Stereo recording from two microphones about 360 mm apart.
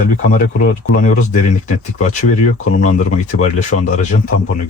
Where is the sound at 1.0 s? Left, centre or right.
Centre.